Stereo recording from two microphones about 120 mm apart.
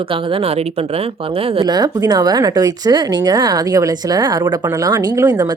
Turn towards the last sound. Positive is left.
turn(degrees=-35)  # may be behind; listen again after turning